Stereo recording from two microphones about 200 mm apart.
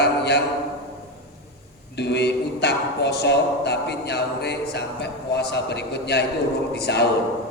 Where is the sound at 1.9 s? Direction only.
55° left (ahead or behind).